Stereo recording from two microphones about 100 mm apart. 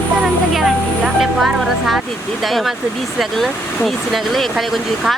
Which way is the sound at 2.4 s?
Centre (ahead or behind).